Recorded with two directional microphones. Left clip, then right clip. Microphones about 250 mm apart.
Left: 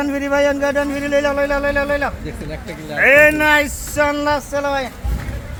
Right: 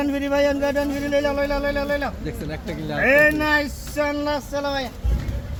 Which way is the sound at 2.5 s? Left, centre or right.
Centre.